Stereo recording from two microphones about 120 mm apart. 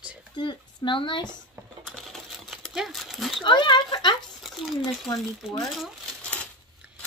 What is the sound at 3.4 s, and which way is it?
Speech, 40° left (ahead or behind).